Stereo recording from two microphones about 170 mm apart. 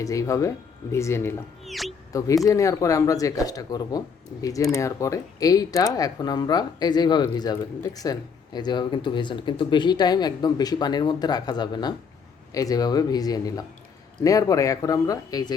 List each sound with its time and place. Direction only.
0.0 s speech: 20° left (ahead or behind)
1.6 s a sound: centre (ahead or behind)
2.1 s speech: 20° left (ahead or behind)